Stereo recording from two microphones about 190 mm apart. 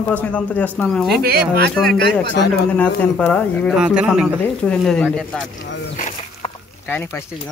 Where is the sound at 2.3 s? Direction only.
60° left (ahead or behind).